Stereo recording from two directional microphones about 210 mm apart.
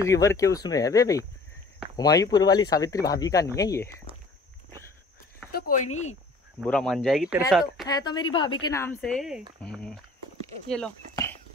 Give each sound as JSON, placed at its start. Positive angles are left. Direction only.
{"t": 0.0, "sound": "speech", "side_deg": 15}
{"t": 5.5, "sound": "speech", "side_deg": 45}
{"t": 6.6, "sound": "speech", "side_deg": 5}
{"t": 7.8, "sound": "speech", "side_deg": 20}